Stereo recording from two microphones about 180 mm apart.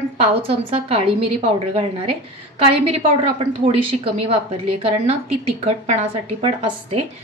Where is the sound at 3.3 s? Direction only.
30° right (ahead or behind).